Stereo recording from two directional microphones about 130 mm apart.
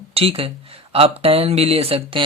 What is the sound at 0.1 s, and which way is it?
Speech, 45° right (ahead or behind).